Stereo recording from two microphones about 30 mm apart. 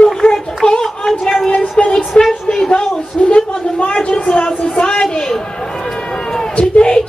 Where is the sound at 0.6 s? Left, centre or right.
Left.